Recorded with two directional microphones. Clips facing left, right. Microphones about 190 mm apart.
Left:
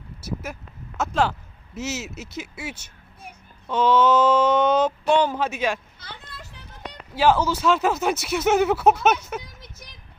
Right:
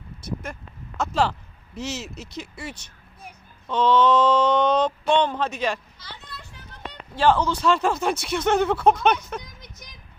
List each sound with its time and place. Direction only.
0.2 s speech: 5° left (ahead or behind)
6.0 s a sound: 50° left (ahead or behind)
7.2 s speech: 5° left (ahead or behind)